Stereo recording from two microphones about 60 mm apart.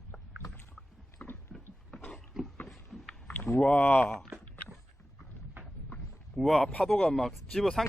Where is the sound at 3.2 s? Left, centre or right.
Left.